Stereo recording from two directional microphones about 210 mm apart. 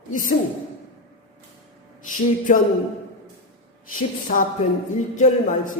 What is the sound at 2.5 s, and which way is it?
Speech, 40° left (ahead or behind).